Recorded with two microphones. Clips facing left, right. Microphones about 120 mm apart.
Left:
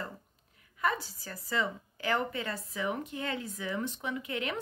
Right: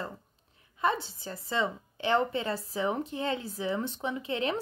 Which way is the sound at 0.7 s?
25° right (ahead or behind).